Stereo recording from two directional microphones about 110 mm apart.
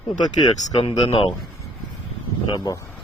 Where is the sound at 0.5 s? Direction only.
90° left.